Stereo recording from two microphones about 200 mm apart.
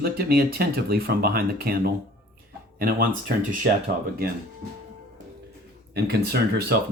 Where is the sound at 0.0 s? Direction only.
50° right (ahead or behind).